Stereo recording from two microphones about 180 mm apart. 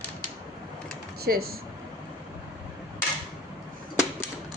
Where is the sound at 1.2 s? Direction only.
60° right (ahead or behind).